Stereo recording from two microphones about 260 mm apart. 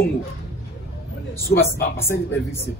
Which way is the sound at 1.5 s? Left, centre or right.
Left.